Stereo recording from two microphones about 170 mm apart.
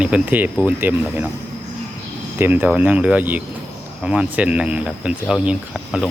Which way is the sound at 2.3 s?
10° right (ahead or behind).